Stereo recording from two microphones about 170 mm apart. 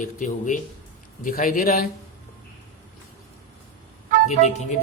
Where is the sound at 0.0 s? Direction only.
50° left (ahead or behind).